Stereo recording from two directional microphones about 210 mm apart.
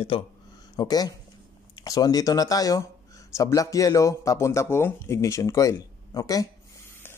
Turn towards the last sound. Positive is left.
turn(degrees=15)  # may be behind; listen again after turning